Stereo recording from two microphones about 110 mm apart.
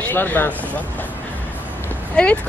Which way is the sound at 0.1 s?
15° left (ahead or behind).